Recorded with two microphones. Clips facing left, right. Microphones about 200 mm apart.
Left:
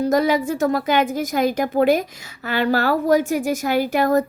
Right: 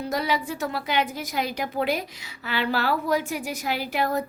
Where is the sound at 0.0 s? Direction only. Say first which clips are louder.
Left 9 dB; 45° left (ahead or behind).